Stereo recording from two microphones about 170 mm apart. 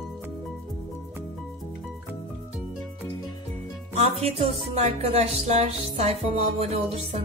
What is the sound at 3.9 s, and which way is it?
Speech, 40° right (ahead or behind).